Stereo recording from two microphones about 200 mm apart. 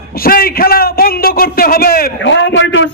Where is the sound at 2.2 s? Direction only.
70° left (ahead or behind).